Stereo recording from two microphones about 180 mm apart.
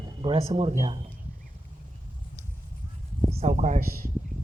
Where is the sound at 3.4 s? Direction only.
40° right (ahead or behind).